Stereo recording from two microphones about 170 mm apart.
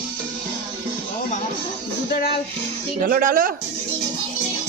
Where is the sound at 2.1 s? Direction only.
65° left (ahead or behind).